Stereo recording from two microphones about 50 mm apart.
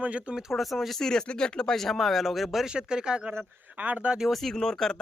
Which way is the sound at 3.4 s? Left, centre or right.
Right.